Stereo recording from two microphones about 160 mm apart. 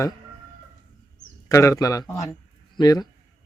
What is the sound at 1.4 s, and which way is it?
A man's voice, 20° left (ahead or behind).